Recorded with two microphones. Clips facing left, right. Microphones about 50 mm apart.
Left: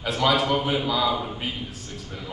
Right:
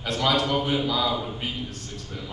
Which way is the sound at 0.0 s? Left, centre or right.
Centre.